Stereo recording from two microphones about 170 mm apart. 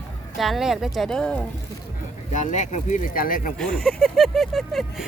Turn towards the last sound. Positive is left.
turn(degrees=0)  # may be behind; listen again after turning